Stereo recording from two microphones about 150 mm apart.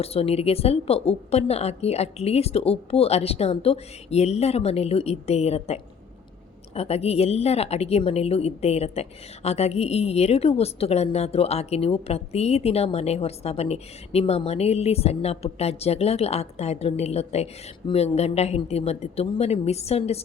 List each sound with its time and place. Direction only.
0.0 s a woman's voice: 40° left (ahead or behind)